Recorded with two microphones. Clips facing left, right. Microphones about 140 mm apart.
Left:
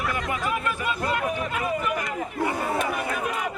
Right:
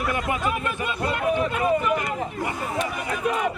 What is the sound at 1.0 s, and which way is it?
Speech, 30° right (ahead or behind).